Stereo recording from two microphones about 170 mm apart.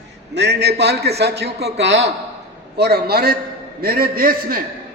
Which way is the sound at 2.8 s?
70° right (ahead or behind).